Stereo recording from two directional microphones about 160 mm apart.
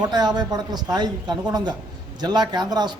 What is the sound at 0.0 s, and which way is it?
Speech, 25° right (ahead or behind).